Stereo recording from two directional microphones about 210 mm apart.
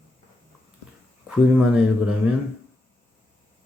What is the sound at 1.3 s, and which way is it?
Speech, 5° right (ahead or behind).